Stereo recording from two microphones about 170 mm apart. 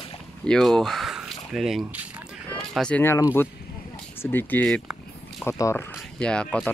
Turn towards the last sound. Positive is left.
turn(degrees=5)  # may be behind; listen again after turning